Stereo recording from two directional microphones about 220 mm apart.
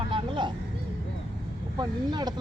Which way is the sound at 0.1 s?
20° right (ahead or behind).